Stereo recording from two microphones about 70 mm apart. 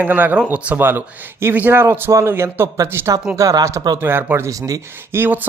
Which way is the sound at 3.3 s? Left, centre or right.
Right.